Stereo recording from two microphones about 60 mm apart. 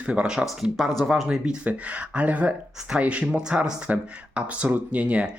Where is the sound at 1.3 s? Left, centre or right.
Centre.